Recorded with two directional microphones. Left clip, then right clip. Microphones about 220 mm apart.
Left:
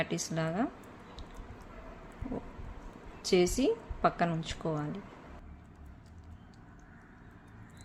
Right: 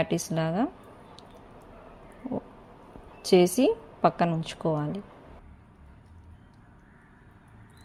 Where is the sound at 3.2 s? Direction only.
25° right (ahead or behind).